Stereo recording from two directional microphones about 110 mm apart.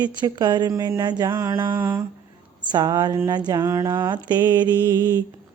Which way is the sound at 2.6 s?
40° right (ahead or behind).